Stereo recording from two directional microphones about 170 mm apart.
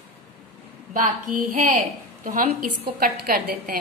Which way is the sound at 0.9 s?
50° right (ahead or behind).